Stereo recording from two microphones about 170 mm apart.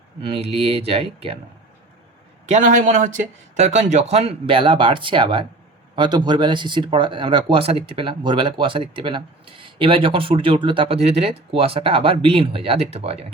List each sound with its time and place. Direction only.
0.3 s speech: 35° right (ahead or behind)
2.5 s speech: 50° right (ahead or behind)